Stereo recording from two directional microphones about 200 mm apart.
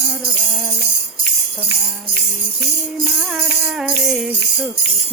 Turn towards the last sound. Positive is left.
turn(degrees=-5)  # may be behind; listen again after turning